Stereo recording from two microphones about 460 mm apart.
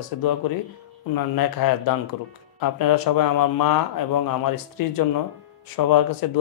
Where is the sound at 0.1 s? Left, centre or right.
Left.